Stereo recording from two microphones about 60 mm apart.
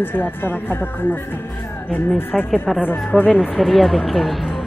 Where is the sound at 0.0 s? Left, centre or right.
Left.